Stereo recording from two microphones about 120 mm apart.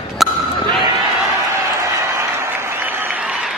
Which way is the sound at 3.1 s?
5° right (ahead or behind).